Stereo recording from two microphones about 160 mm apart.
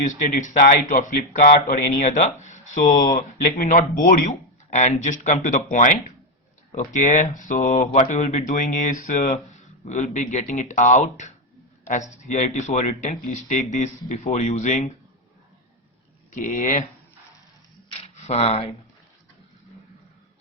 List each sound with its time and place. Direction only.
0.3 s speech: 55° left (ahead or behind)
16.3 s speech: 55° left (ahead or behind)
17.9 s a sound: 45° left (ahead or behind)